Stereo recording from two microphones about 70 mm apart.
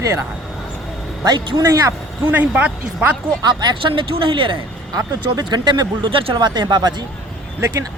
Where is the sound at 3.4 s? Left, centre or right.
Right.